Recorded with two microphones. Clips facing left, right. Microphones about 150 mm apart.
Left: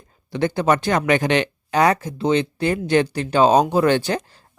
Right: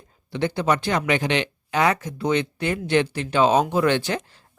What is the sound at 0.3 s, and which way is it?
Speech, 45° left (ahead or behind).